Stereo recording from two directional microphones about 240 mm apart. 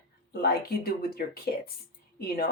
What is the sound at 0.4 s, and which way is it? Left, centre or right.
Speech, left.